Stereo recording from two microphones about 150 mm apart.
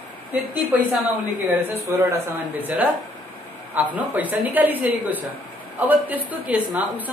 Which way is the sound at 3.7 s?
10° right (ahead or behind).